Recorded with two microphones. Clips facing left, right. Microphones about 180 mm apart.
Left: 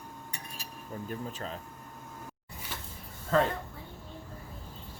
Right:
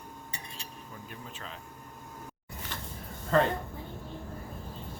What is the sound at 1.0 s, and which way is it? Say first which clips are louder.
Speech: left 8 dB; 40° left (ahead or behind).